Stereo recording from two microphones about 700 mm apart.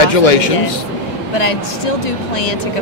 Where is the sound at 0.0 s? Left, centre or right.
Left.